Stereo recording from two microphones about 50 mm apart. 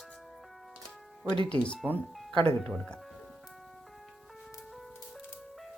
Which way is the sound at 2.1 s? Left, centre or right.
Centre.